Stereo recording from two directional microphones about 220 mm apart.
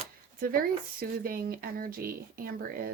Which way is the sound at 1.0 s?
40° right (ahead or behind).